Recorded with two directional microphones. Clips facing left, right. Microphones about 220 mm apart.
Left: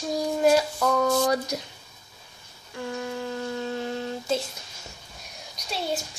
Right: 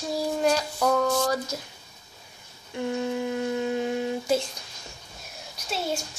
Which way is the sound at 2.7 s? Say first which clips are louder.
Right 4 dB; 20° right (ahead or behind).